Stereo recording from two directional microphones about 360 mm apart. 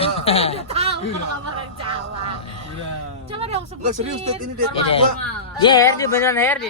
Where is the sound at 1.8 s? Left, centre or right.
Right.